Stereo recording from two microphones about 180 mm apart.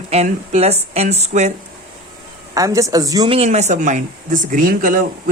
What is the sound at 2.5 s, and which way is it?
Speech, 20° right (ahead or behind).